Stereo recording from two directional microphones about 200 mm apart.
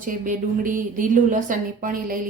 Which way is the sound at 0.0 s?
40° right (ahead or behind).